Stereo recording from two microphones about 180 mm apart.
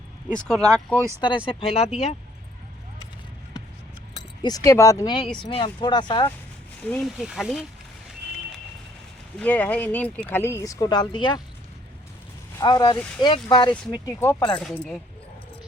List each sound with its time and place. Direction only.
0.3 s speech: 5° left (ahead or behind)
1.5 s speech: 30° left (ahead or behind)
4.4 s speech: 20° left (ahead or behind)
6.9 s speech: centre (ahead or behind)
9.4 s speech: 10° left (ahead or behind); by 11.4 s 25° left (ahead or behind)
12.5 s speech: 20° left (ahead or behind); by 14.9 s 5° left (ahead or behind)